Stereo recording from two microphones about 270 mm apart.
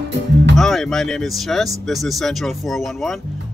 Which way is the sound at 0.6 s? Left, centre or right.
Centre.